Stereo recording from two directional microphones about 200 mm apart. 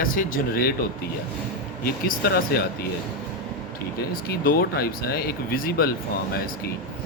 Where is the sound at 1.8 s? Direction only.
50° left (ahead or behind).